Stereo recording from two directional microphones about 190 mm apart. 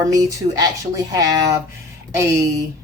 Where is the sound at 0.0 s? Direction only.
20° right (ahead or behind).